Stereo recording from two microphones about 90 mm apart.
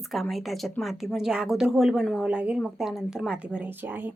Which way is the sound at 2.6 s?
Centre (ahead or behind).